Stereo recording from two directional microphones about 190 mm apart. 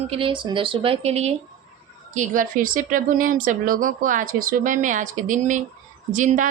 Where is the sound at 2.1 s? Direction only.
45° right (ahead or behind).